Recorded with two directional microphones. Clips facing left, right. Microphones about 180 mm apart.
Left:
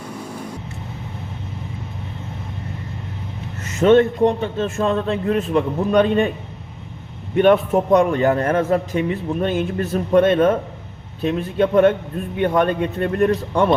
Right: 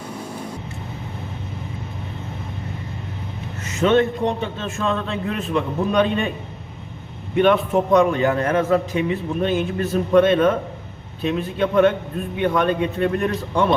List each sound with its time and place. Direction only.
3.6 s a man's voice: 50° left (ahead or behind)
7.3 s a man's voice: 50° left (ahead or behind)